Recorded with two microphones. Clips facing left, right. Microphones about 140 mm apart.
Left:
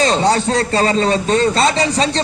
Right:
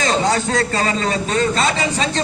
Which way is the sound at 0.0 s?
35° left (ahead or behind).